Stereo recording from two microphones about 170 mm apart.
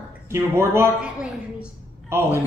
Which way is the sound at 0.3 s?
15° right (ahead or behind).